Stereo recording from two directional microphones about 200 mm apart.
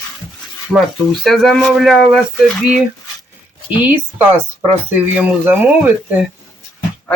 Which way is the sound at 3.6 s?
10° right (ahead or behind).